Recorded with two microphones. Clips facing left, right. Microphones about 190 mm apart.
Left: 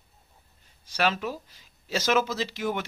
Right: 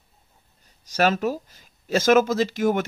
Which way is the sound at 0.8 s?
45° right (ahead or behind).